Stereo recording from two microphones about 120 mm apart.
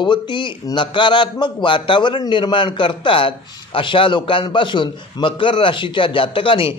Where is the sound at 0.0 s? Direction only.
40° left (ahead or behind).